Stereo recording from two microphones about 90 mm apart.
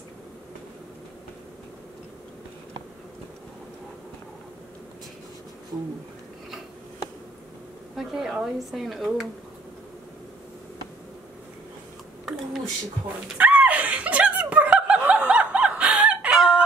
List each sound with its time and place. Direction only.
7.9 s speech: 5° right (ahead or behind)
13.4 s snicker: 15° right (ahead or behind)